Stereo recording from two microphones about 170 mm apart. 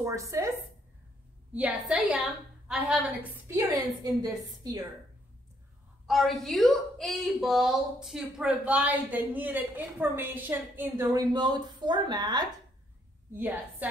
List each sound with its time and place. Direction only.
0.0 s a woman's voice: 20° right (ahead or behind)
6.0 s a woman's voice: centre (ahead or behind); by 12.4 s 25° right (ahead or behind)